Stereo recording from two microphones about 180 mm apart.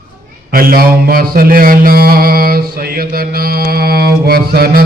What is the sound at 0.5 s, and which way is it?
Mantra, 55° right (ahead or behind).